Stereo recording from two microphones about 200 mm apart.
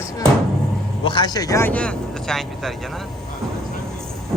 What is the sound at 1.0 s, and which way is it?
Speech, 20° left (ahead or behind).